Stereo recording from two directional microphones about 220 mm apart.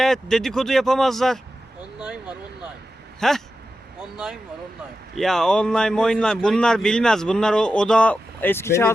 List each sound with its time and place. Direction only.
0.0 s a man's voice: centre (ahead or behind)